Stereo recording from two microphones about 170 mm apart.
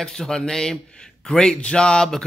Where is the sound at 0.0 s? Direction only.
5° left (ahead or behind).